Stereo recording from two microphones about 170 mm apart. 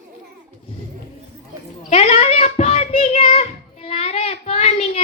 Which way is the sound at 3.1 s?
45° left (ahead or behind).